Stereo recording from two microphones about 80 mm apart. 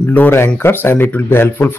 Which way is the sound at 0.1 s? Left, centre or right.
Left.